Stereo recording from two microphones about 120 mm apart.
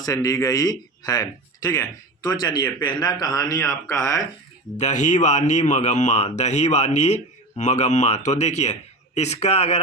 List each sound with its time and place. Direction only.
0.0 s a man's voice: 30° left (ahead or behind)
4.8 s speech: 80° left; by 9.8 s 65° left (ahead or behind)